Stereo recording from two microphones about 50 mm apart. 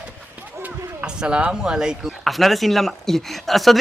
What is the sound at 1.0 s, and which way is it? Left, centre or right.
Speech, centre.